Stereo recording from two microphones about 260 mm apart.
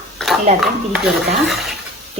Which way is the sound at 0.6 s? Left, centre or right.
Centre.